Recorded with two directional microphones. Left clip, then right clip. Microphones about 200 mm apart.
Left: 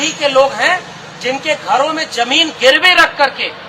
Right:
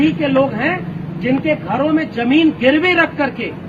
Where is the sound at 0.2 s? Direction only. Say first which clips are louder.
Left 5 dB; 15° left (ahead or behind).